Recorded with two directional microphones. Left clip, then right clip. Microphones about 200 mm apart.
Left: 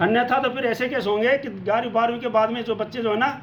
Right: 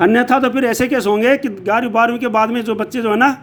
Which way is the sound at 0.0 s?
50° right (ahead or behind).